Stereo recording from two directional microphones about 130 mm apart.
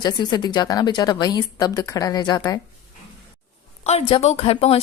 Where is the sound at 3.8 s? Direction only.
55° left (ahead or behind).